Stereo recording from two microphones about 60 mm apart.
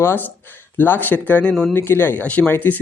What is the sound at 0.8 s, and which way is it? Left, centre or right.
Speech, left.